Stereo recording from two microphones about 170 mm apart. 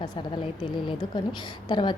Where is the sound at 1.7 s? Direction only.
25° left (ahead or behind).